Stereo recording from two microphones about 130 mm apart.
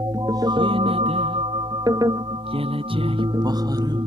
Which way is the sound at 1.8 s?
30° right (ahead or behind).